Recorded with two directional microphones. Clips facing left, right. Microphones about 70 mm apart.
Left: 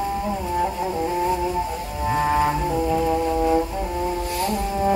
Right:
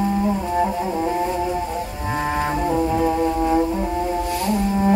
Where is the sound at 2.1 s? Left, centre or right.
Centre.